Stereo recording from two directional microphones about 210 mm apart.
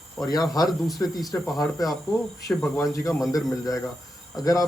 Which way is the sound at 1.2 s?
Centre (ahead or behind).